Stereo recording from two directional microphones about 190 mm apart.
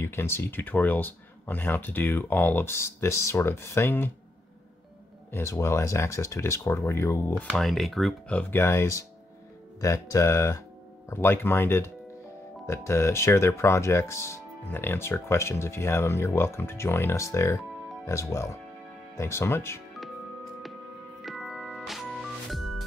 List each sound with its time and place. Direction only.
0.0 s speech: 15° left (ahead or behind)
5.3 s speech: 15° left (ahead or behind)
7.4 s speech: centre (ahead or behind)
21.2 s music: centre (ahead or behind)